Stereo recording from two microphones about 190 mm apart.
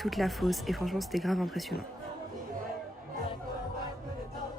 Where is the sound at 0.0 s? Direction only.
Centre (ahead or behind).